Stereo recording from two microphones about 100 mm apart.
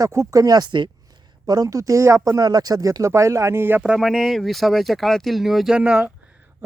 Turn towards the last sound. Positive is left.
turn(degrees=-10)  # may be behind; listen again after turning